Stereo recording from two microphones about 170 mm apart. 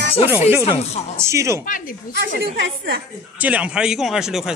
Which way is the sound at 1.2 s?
15° right (ahead or behind).